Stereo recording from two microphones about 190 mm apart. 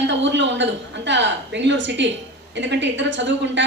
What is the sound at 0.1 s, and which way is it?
A woman's voice, 70° right (ahead or behind).